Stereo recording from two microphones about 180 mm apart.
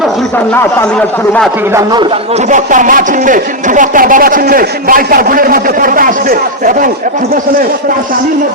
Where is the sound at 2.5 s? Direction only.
45° right (ahead or behind).